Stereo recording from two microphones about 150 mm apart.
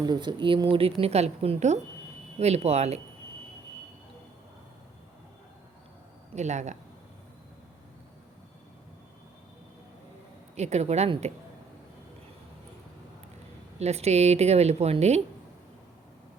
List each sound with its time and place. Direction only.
0.0 s a woman's voice: 30° right (ahead or behind)
6.3 s speech: 50° right (ahead or behind)
10.5 s speech: 45° right (ahead or behind)
13.7 s speech: 45° right (ahead or behind)